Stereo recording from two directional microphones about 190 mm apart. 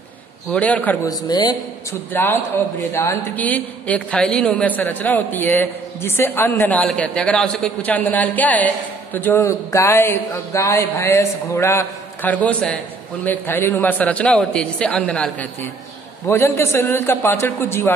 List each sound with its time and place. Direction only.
0.5 s a man's voice: 5° left (ahead or behind)
1.0 s a man's voice: 20° left (ahead or behind)